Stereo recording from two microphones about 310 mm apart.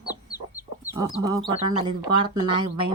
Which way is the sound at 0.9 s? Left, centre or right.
Centre.